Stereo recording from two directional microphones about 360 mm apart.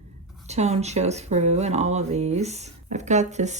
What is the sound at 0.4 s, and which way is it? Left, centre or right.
Speech, centre.